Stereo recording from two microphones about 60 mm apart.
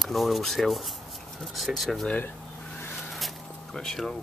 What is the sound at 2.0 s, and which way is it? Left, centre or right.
Speech, left.